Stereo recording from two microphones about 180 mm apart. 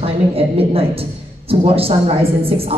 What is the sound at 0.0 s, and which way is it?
A woman's voice, 30° right (ahead or behind).